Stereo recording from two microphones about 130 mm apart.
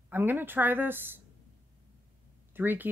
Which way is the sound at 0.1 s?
15° right (ahead or behind).